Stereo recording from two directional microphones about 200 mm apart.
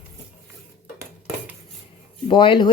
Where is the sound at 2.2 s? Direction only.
25° left (ahead or behind).